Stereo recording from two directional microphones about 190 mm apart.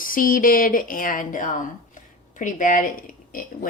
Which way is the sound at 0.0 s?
45° left (ahead or behind).